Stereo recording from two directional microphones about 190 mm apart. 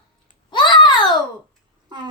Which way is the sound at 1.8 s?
20° right (ahead or behind).